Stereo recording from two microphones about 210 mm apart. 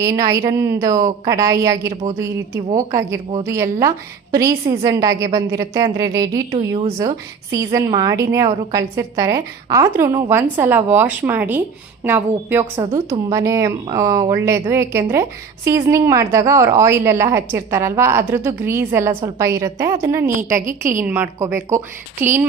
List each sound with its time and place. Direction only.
0.0 s a woman's voice: 15° right (ahead or behind)
20.6 s a woman's voice: 40° right (ahead or behind)
21.0 s a woman's voice: 10° right (ahead or behind)